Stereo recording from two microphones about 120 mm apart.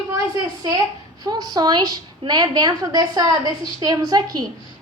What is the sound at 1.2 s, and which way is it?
A woman's voice, 30° right (ahead or behind).